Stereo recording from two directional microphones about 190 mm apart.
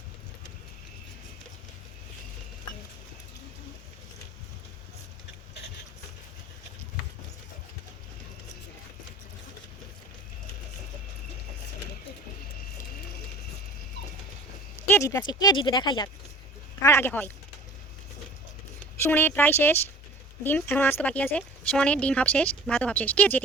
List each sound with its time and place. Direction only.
14.8 s speech: 15° left (ahead or behind)
19.0 s speech: 10° left (ahead or behind)